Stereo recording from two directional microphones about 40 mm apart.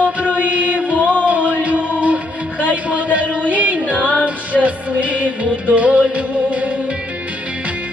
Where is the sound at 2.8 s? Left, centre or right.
Right.